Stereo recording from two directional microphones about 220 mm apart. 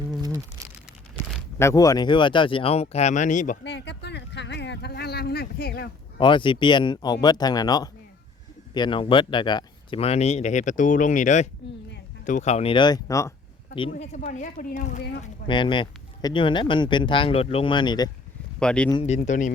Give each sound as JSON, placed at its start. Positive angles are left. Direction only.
{"t": 0.2, "sound": "a sound", "side_deg": -15}
{"t": 1.5, "sound": "speech", "side_deg": 15}
{"t": 3.6, "sound": "a sound", "side_deg": 50}
{"t": 6.1, "sound": "speech", "side_deg": 20}
{"t": 13.9, "sound": "speech", "side_deg": 30}
{"t": 15.4, "sound": "speech", "side_deg": 20}
{"t": 18.6, "sound": "speech", "side_deg": 5}
{"t": 18.9, "sound": "speech", "side_deg": 25}